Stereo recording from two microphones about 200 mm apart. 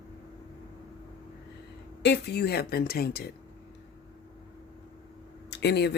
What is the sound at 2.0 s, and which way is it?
Speech, 55° left (ahead or behind).